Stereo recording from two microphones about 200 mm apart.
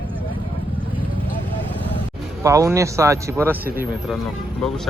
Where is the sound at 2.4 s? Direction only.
15° right (ahead or behind).